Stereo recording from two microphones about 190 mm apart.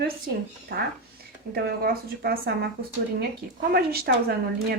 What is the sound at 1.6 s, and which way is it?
Speech, 55° right (ahead or behind).